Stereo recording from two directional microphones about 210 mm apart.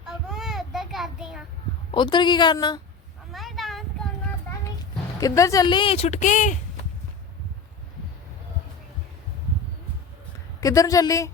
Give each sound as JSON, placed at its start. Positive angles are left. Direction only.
{"t": 0.0, "sound": "child singing", "side_deg": 0}
{"t": 1.9, "sound": "speech", "side_deg": 20}
{"t": 3.3, "sound": "a sound", "side_deg": 0}
{"t": 5.2, "sound": "speech", "side_deg": 15}
{"t": 10.6, "sound": "a woman's voice", "side_deg": 15}